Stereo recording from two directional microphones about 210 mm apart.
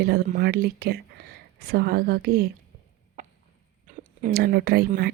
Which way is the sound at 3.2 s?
35° right (ahead or behind).